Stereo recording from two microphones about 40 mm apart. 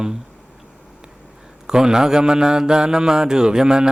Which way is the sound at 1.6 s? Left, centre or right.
Centre.